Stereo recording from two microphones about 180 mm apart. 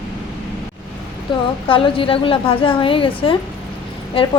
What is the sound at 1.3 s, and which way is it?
A woman's voice, 25° left (ahead or behind).